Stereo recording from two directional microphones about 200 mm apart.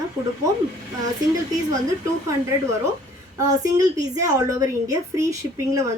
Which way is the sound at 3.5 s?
15° right (ahead or behind).